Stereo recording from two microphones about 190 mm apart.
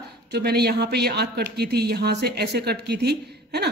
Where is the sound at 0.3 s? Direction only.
60° right (ahead or behind).